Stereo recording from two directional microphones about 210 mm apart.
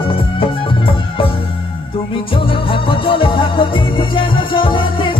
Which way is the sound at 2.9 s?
25° left (ahead or behind).